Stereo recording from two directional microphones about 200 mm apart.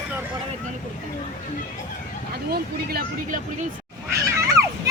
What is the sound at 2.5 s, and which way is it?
Speech, 45° right (ahead or behind).